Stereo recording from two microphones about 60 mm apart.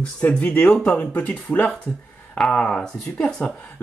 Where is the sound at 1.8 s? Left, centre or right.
Centre.